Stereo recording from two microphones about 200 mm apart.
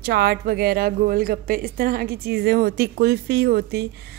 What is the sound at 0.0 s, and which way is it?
A woman's voice, 50° right (ahead or behind).